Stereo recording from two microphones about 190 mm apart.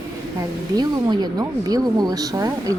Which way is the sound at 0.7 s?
20° right (ahead or behind).